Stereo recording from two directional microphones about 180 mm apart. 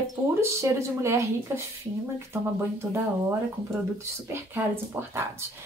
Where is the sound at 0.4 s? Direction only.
15° right (ahead or behind).